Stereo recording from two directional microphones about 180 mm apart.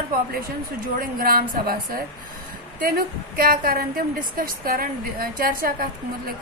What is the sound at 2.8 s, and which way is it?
A woman's voice, 55° right (ahead or behind).